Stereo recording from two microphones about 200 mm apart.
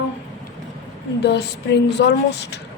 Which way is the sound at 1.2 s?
55° left (ahead or behind).